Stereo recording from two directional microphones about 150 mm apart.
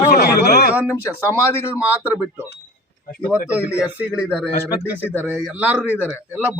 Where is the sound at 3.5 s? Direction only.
10° right (ahead or behind).